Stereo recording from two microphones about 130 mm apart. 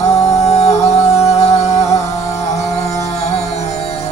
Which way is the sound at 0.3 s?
55° left (ahead or behind).